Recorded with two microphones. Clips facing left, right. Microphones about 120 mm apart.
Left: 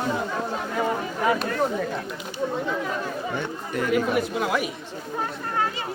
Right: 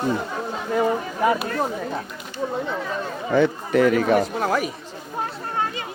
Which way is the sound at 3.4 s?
90° right.